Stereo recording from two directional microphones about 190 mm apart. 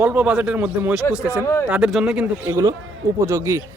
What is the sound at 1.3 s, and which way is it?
Speech, 15° left (ahead or behind).